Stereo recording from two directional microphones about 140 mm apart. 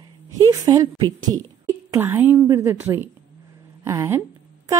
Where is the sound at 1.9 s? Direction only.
15° right (ahead or behind).